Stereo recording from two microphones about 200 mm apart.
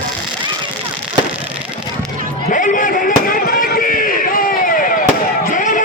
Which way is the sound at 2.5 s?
40° left (ahead or behind).